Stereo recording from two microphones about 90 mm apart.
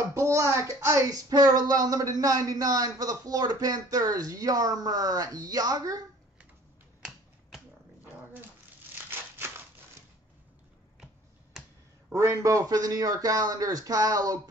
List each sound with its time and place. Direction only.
0.1 s a sound: 30° right (ahead or behind)
1.1 s speech: 45° right (ahead or behind)
12.1 s speech: 35° right (ahead or behind)